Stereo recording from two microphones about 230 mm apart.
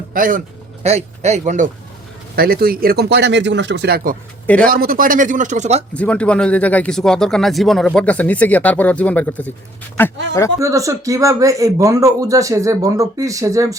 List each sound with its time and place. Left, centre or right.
0.1 s a man's voice: right
5.9 s speech: centre
10.6 s speech: centre